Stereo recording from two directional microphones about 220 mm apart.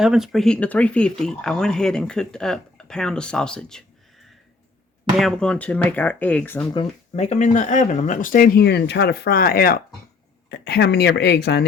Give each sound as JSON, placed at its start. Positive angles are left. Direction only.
{"t": 0.0, "sound": "speech", "side_deg": 0}
{"t": 5.1, "sound": "speech", "side_deg": 0}
{"t": 6.7, "sound": "speech", "side_deg": 30}